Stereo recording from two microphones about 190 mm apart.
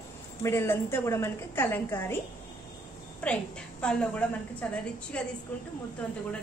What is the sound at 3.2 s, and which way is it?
A woman's voice, 5° left (ahead or behind).